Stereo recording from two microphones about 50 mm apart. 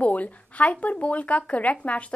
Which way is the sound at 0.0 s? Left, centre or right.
Left.